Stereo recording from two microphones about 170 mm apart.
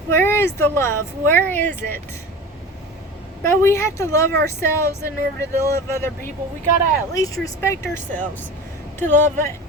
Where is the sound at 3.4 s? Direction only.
15° left (ahead or behind).